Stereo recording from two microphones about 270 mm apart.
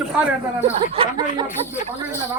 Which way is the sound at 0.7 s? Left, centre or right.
Right.